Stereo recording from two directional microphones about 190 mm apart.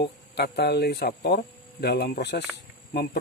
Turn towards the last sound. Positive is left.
turn(degrees=55)  # may be behind; listen again after turning